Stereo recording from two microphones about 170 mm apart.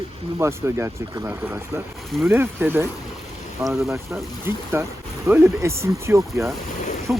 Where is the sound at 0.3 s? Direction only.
15° right (ahead or behind).